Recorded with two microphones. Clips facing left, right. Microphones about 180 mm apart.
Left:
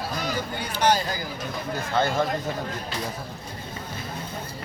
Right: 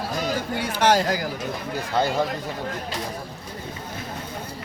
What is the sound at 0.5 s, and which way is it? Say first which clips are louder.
Speech: right 3 dB; 90° right.